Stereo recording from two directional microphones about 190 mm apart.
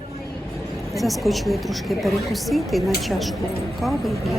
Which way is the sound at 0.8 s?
Centre (ahead or behind).